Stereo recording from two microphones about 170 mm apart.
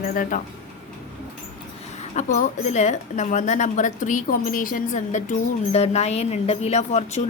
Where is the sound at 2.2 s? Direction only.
45° left (ahead or behind).